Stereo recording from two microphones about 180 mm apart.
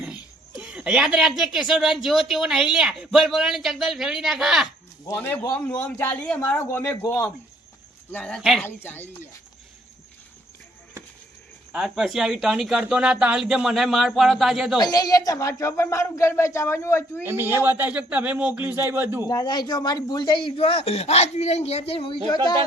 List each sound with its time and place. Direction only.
0.0 s speech: 5° right (ahead or behind)
5.0 s speech: 10° left (ahead or behind)
8.6 s speech: 10° left (ahead or behind)
11.7 s speech: 5° right (ahead or behind)
14.8 s speech: 20° left (ahead or behind)
17.2 s speech: 10° right (ahead or behind)
19.3 s speech: 20° left (ahead or behind)